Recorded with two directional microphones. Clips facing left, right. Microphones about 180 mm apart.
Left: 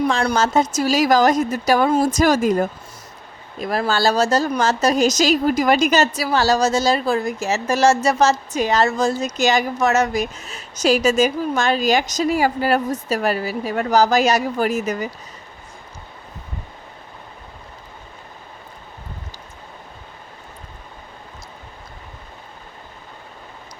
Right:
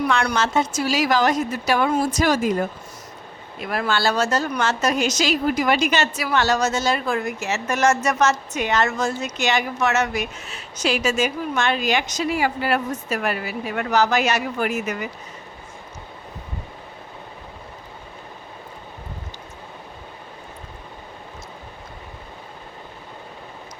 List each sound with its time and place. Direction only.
0.0 s a woman's voice: 30° left (ahead or behind)